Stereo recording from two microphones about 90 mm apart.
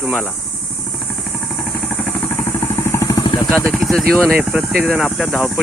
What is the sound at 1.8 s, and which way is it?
Vehicle, 20° left (ahead or behind).